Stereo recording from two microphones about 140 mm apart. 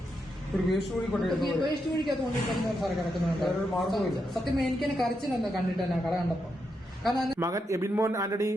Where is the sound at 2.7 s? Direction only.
Centre (ahead or behind).